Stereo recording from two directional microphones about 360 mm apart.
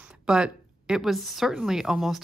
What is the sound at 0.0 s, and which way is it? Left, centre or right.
A woman's voice, centre.